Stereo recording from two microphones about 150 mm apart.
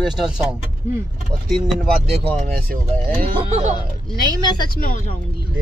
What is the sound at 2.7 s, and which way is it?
Speech, 65° right (ahead or behind).